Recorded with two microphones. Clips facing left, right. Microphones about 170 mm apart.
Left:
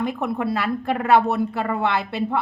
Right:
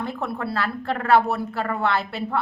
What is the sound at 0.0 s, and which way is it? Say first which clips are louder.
A woman's voice: left 4 dB; 15° left (ahead or behind).